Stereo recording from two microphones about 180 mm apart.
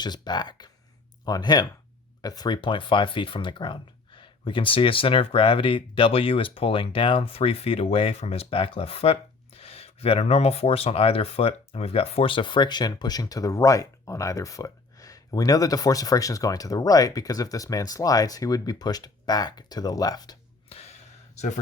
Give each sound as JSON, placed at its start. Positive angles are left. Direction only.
{"t": 0.0, "sound": "speech", "side_deg": 25}